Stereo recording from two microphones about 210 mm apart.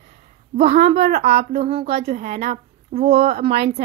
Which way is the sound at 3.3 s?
50° right (ahead or behind).